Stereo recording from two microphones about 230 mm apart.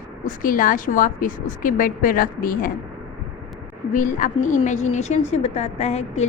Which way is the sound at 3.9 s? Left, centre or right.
Left.